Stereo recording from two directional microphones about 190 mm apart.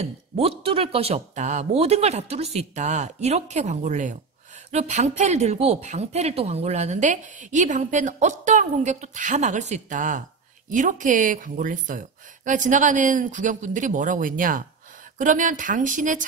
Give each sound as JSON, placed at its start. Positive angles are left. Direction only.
{"t": 0.0, "sound": "a woman's voice", "side_deg": -30}